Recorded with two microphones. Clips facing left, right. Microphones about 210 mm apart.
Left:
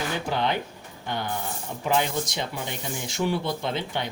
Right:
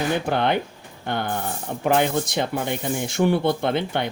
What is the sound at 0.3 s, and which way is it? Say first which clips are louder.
Speech: right 5 dB; 55° right (ahead or behind).